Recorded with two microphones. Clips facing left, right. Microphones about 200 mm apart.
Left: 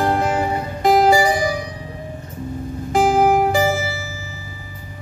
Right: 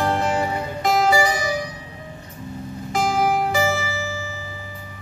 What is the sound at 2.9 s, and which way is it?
Music, 40° left (ahead or behind).